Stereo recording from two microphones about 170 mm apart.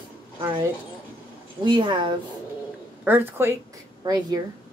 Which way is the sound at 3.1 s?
15° right (ahead or behind).